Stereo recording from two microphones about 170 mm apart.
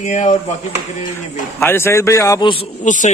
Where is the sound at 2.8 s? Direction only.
50° left (ahead or behind).